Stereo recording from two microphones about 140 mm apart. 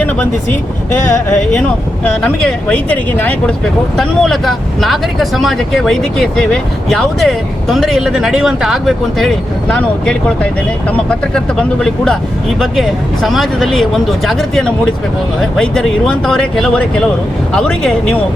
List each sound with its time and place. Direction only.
2.2 s speech: 5° left (ahead or behind)
11.3 s speech: 5° left (ahead or behind)
13.2 s speech: centre (ahead or behind)